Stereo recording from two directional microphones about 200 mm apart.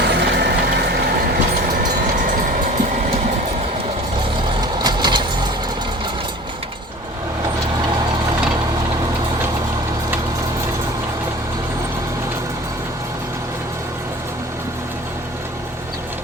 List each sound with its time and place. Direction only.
0.0 s vehicle: 55° right (ahead or behind); by 3.1 s 40° right (ahead or behind)
4.8 s vehicle: 20° right (ahead or behind)